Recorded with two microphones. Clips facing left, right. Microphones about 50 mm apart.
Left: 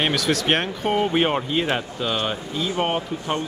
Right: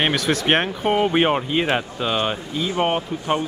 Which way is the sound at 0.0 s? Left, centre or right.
Centre.